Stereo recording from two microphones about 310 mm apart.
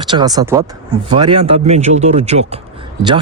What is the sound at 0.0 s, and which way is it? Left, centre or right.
Speech, centre.